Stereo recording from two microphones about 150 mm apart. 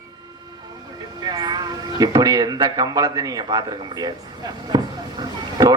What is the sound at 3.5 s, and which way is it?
Speech, 25° right (ahead or behind).